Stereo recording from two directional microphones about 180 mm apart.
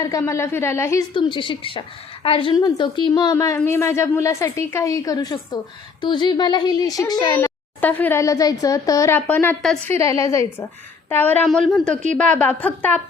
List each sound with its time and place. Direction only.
0.0 s a woman's voice: 15° left (ahead or behind)
1.1 s a woman's voice: 25° left (ahead or behind)
7.3 s a woman's voice: 10° left (ahead or behind)